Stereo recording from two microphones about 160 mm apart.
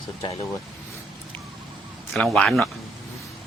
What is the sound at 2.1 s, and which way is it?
Speech, 5° left (ahead or behind).